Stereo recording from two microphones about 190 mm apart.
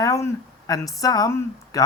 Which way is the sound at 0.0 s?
15° left (ahead or behind).